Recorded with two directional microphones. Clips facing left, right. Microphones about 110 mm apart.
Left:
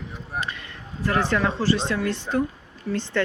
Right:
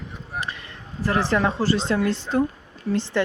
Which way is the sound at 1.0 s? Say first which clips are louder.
Right 1 dB; 30° right (ahead or behind).